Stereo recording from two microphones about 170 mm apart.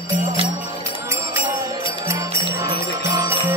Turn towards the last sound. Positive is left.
turn(degrees=-15)  # may be behind; listen again after turning